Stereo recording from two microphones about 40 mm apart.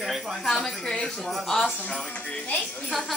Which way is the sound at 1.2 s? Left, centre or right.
Centre.